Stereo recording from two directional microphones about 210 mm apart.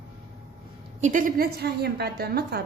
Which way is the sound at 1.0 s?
40° right (ahead or behind).